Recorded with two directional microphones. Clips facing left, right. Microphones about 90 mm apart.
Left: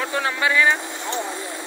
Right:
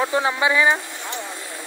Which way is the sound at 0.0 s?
20° right (ahead or behind).